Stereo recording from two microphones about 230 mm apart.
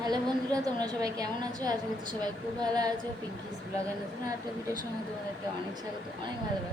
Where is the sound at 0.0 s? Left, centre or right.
Centre.